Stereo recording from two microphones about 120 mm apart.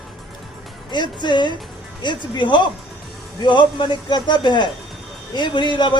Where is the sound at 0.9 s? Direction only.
40° left (ahead or behind).